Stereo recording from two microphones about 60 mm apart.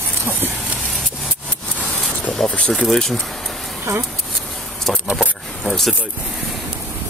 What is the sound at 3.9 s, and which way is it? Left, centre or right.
Speech, right.